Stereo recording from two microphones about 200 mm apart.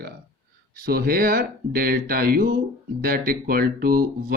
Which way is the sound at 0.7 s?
50° right (ahead or behind).